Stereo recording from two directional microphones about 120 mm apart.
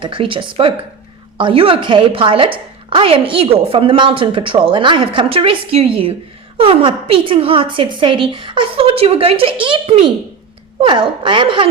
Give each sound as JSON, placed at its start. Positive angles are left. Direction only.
{"t": 0.0, "sound": "a woman's voice", "side_deg": -45}